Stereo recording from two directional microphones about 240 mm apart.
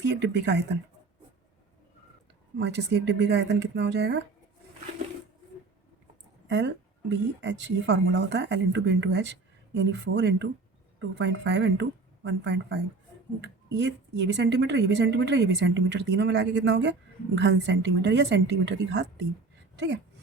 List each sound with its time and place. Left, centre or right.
0.0 s a woman's voice: right
2.6 s a woman's voice: right
7.1 s a woman's voice: right